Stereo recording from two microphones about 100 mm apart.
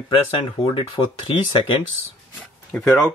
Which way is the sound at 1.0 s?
50° left (ahead or behind).